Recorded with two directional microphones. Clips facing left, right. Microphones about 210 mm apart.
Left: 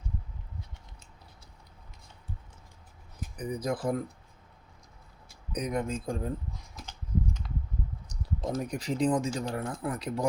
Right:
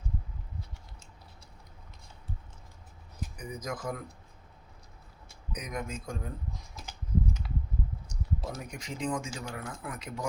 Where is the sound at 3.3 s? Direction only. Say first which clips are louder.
Left 7 dB; 35° left (ahead or behind).